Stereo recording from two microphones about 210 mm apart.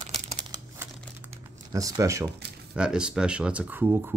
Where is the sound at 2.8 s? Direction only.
5° right (ahead or behind).